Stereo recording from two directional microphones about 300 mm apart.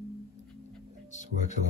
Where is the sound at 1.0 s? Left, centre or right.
Left.